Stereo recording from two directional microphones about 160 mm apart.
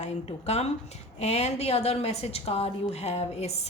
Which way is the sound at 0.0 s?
45° left (ahead or behind).